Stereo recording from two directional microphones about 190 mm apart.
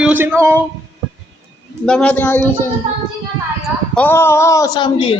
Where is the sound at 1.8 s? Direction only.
5° left (ahead or behind).